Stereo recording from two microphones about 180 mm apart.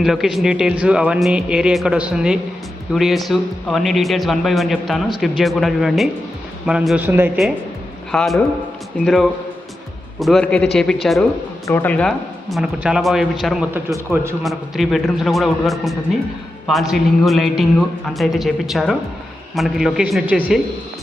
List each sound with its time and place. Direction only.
0.0 s a man's voice: centre (ahead or behind)
13.9 s speech: 15° right (ahead or behind)
14.4 s a man's voice: centre (ahead or behind)